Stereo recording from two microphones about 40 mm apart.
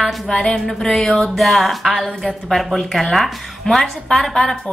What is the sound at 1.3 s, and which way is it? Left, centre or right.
A woman's voice, centre.